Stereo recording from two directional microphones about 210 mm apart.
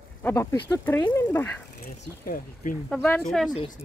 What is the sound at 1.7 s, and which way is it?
Speech, 45° left (ahead or behind).